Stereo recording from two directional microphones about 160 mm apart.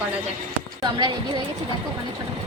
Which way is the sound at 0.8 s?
25° right (ahead or behind).